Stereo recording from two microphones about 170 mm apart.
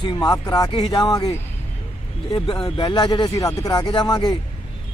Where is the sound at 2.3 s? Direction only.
30° left (ahead or behind).